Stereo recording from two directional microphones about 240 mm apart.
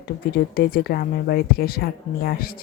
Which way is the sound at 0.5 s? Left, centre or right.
Left.